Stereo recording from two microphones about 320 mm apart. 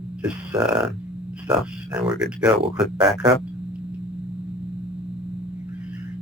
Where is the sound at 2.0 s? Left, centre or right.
Centre.